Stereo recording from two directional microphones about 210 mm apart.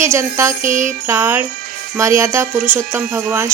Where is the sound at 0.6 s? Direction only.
40° right (ahead or behind).